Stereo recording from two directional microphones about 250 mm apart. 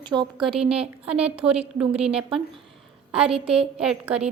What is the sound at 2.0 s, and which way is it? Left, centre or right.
A woman's voice, right.